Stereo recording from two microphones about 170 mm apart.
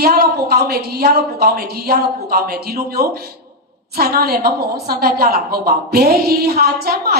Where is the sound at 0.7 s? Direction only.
65° right (ahead or behind).